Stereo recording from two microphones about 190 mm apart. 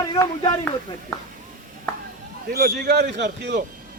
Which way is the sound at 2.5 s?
55° right (ahead or behind).